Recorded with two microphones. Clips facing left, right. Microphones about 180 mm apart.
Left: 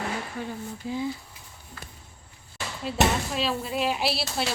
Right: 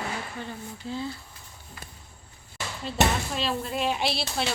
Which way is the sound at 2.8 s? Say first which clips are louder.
Left 1 dB; 5° left (ahead or behind).